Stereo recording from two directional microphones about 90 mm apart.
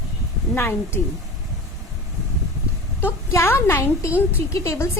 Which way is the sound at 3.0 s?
25° left (ahead or behind).